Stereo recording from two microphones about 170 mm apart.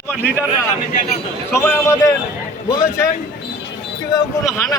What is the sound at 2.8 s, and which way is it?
Speech, 20° left (ahead or behind).